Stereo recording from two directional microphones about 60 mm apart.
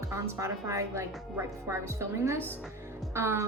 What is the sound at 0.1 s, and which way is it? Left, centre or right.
A woman's voice, right.